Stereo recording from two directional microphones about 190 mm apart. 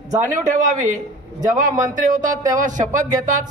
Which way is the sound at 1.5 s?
40° right (ahead or behind).